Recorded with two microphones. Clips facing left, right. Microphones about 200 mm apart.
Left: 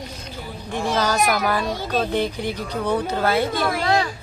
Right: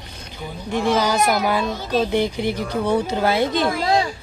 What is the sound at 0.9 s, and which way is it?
A man's voice, 15° right (ahead or behind).